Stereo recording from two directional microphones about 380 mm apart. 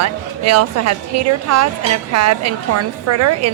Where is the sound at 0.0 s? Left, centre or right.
Right.